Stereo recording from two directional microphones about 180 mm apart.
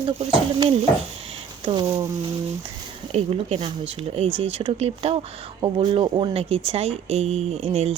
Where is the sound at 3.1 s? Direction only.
35° right (ahead or behind).